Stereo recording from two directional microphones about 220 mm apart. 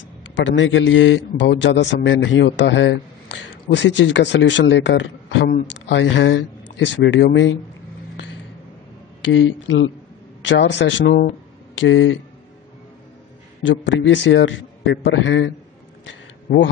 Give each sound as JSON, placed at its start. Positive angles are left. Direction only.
{"t": 0.4, "sound": "a man's voice", "side_deg": 55}
{"t": 9.2, "sound": "a man's voice", "side_deg": 55}
{"t": 13.6, "sound": "a man's voice", "side_deg": 55}
{"t": 16.1, "sound": "a sound", "side_deg": 55}